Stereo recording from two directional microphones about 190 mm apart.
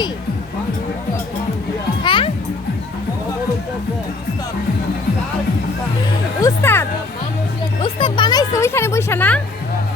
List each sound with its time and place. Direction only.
2.0 s music: 25° left (ahead or behind)
6.4 s music: 10° left (ahead or behind)
7.8 s speech: 25° left (ahead or behind); by 9.4 s 10° left (ahead or behind)